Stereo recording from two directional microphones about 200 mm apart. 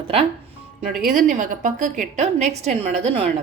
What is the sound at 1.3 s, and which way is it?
A woman's voice, 40° right (ahead or behind).